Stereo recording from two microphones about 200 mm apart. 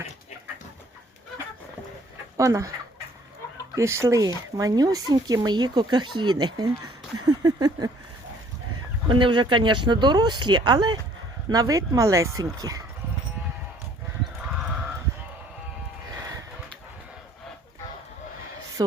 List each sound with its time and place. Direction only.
2.4 s speech: 15° right (ahead or behind)
3.8 s speech: 15° right (ahead or behind)
9.0 s speech: 25° right (ahead or behind)
18.8 s a sound: 15° right (ahead or behind)